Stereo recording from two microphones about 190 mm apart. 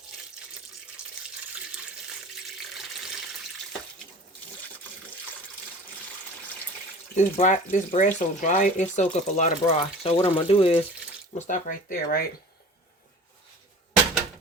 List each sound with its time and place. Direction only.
7.2 s speech: 40° left (ahead or behind)
11.3 s speech: 40° left (ahead or behind)